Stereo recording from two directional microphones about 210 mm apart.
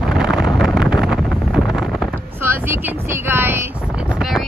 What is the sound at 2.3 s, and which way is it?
Speech, 10° right (ahead or behind).